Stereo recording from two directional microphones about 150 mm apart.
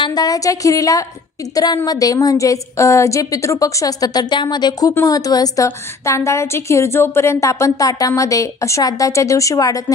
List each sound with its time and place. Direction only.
0.0 s a woman's voice: 25° left (ahead or behind)